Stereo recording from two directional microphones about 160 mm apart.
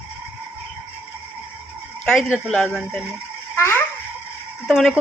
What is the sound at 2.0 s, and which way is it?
Speech, 5° left (ahead or behind).